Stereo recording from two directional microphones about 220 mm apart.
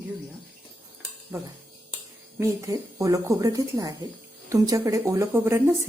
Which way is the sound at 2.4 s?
15° right (ahead or behind).